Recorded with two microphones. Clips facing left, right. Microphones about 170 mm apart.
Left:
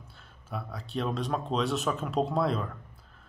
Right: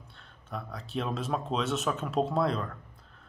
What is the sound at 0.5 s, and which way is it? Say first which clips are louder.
Speech: left 1 dB; 5° left (ahead or behind).